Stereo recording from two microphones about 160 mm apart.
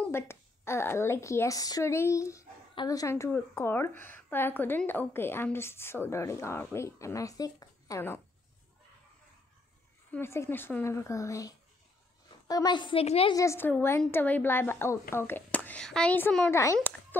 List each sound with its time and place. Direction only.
0.0 s a woman's voice: 15° left (ahead or behind)
10.1 s a woman's voice: 15° left (ahead or behind); by 13.3 s 40° left (ahead or behind)
13.3 s a woman's voice: 20° left (ahead or behind)